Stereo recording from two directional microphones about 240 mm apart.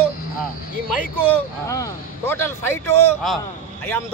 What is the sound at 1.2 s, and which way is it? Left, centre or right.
Speech, centre.